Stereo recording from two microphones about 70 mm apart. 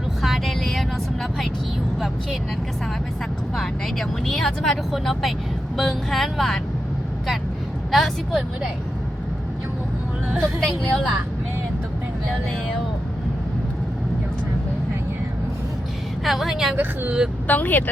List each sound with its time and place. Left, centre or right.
0.2 s vehicle: centre
3.5 s speech: centre
7.9 s speech: centre
10.6 s a woman's voice: centre
16.2 s speech: centre
17.4 s speech: left